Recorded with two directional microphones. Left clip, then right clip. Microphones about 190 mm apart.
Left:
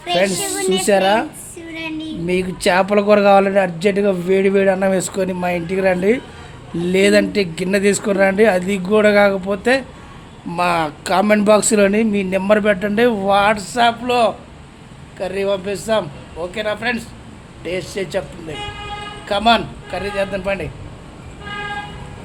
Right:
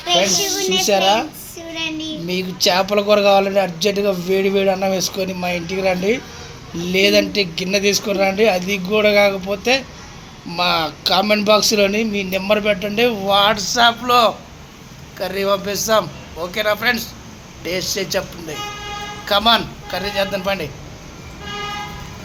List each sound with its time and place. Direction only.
0.3 s speech: 15° left (ahead or behind)
0.9 s a man's voice: 40° left (ahead or behind)
1.7 s child singing: 15° left (ahead or behind)
2.2 s a man's voice: 35° left (ahead or behind); by 20.7 s 20° left (ahead or behind)